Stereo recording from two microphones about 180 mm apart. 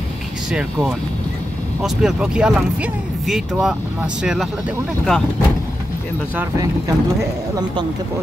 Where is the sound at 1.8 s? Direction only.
5° right (ahead or behind).